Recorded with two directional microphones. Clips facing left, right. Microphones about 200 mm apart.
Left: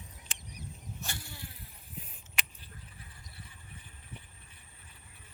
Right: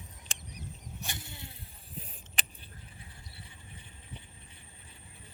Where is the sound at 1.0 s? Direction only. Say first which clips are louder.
Right 1 dB; 20° right (ahead or behind).